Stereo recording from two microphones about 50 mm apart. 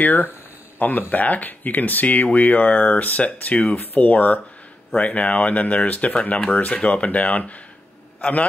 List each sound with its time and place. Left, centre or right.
0.0 s a man's voice: left